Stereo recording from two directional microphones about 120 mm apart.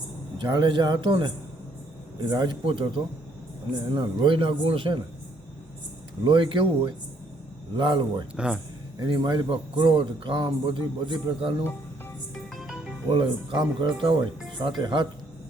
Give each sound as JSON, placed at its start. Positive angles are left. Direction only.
{"t": 0.3, "sound": "a man's voice", "side_deg": -40}
{"t": 6.2, "sound": "a man's voice", "side_deg": -45}
{"t": 8.4, "sound": "speech", "side_deg": -10}
{"t": 9.0, "sound": "a man's voice", "side_deg": -40}
{"t": 12.3, "sound": "music", "side_deg": 0}
{"t": 13.1, "sound": "a man's voice", "side_deg": -40}